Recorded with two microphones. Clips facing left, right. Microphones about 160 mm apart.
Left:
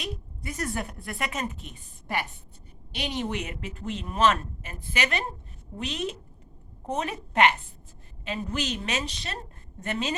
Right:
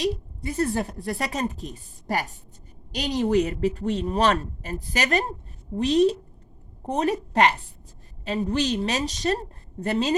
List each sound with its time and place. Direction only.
0.0 s speech: 30° right (ahead or behind)
8.2 s speech: 35° right (ahead or behind)